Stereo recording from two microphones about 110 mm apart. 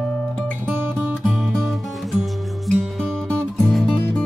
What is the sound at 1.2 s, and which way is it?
Music, centre (ahead or behind).